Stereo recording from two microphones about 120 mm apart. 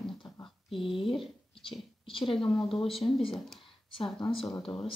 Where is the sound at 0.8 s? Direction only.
45° left (ahead or behind).